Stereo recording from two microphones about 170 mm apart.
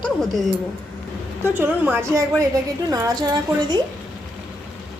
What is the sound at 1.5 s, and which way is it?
A woman's voice, 10° right (ahead or behind).